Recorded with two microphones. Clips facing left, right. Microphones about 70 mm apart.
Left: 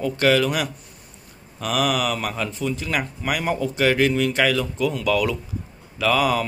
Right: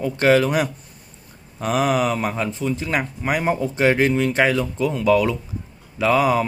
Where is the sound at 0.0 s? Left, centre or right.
Right.